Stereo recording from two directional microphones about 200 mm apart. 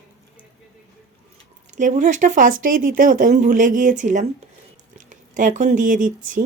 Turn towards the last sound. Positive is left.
turn(degrees=-40)  # may be behind; listen again after turning